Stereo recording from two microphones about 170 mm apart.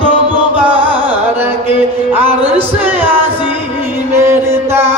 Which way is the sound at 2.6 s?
10° right (ahead or behind).